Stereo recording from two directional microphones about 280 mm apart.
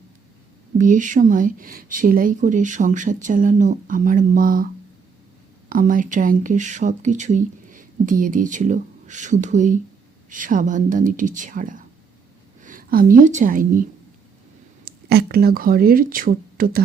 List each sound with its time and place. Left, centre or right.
0.8 s a woman's voice: right
14.8 s speech: right